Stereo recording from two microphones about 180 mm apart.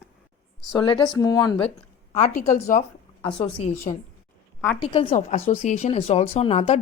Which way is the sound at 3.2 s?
30° left (ahead or behind).